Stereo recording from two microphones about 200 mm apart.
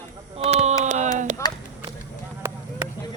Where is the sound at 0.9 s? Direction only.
35° right (ahead or behind).